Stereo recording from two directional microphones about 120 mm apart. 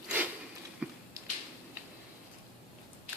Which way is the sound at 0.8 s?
10° right (ahead or behind).